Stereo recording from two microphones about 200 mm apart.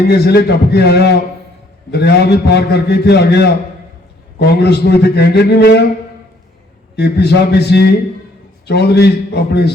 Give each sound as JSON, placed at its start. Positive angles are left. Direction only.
{"t": 0.1, "sound": "a man's voice", "side_deg": 55}
{"t": 6.9, "sound": "a man's voice", "side_deg": 55}